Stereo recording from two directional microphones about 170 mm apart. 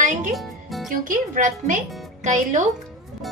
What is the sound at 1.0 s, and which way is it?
A woman's voice, 50° right (ahead or behind).